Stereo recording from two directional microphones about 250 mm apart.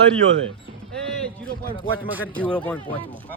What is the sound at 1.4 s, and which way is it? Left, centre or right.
Speech, right.